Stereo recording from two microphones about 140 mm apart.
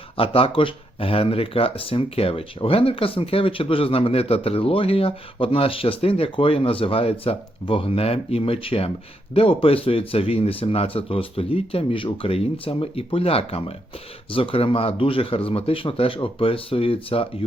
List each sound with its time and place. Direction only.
0.2 s speech: 40° left (ahead or behind)